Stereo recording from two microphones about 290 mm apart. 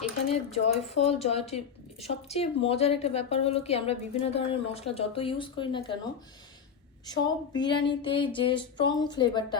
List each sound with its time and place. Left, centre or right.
0.3 s speech: left
7.1 s speech: centre